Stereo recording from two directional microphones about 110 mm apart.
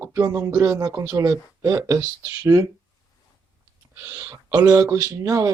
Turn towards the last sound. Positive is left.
turn(degrees=-30)  # may be behind; listen again after turning